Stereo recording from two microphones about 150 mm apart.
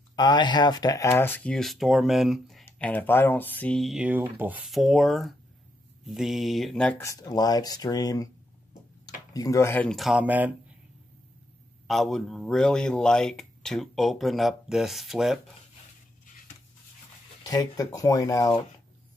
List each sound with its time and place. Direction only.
0.1 s speech: 30° left (ahead or behind); by 2.6 s centre (ahead or behind)
2.6 s speech: 10° left (ahead or behind); by 4.6 s 10° right (ahead or behind)
4.6 s speech: centre (ahead or behind)
7.0 s speech: 20° left (ahead or behind)
9.0 s tick-tock: 25° left (ahead or behind)
9.8 s speech: centre (ahead or behind)
11.9 s speech: centre (ahead or behind)
17.4 s speech: 25° left (ahead or behind)